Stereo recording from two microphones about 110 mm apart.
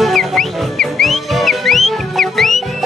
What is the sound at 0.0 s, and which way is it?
Music, centre (ahead or behind).